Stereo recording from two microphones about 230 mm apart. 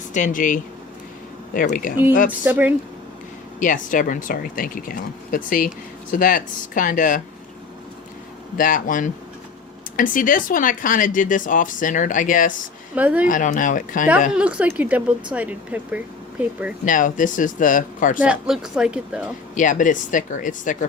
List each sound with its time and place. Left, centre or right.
0.1 s speech: left
2.4 s speech: centre
3.6 s speech: left
8.5 s speech: left
13.0 s speech: centre
13.2 s speech: left
14.3 s speech: centre
16.8 s speech: left
18.2 s speech: centre
19.5 s speech: left